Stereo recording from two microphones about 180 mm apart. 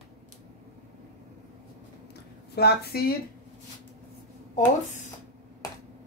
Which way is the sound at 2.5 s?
60° left (ahead or behind).